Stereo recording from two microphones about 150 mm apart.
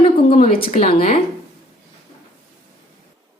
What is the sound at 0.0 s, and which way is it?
Speech, 40° left (ahead or behind).